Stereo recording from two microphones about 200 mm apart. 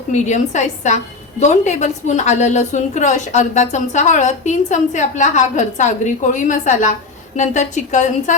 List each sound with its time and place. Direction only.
0.1 s a woman's voice: 35° left (ahead or behind)